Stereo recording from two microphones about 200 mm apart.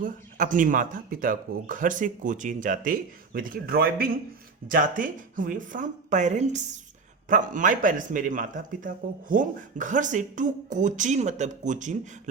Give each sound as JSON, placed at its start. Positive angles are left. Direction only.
{"t": 0.0, "sound": "speech", "side_deg": -40}